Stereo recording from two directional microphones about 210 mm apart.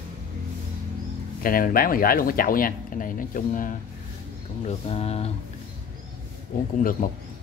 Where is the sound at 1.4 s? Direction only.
45° left (ahead or behind).